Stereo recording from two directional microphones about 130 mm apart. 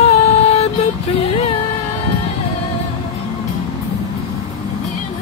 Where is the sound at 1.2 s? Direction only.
50° left (ahead or behind).